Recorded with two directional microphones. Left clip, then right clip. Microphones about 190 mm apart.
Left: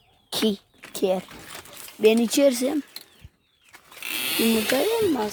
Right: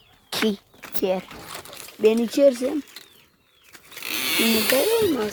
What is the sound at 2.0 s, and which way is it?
Speech, 30° left (ahead or behind).